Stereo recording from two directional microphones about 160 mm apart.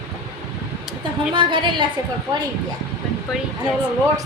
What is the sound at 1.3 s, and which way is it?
Speech, 30° right (ahead or behind).